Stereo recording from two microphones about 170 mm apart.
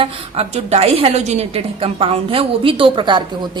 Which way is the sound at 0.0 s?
35° right (ahead or behind).